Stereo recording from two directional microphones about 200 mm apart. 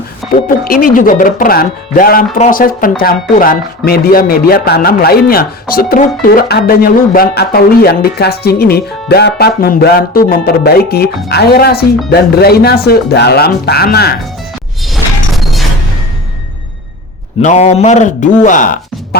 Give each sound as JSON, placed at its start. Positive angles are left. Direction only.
{"t": 0.4, "sound": "speech", "side_deg": 45}
{"t": 14.9, "sound": "a sound", "side_deg": 0}
{"t": 17.4, "sound": "a man's voice", "side_deg": 35}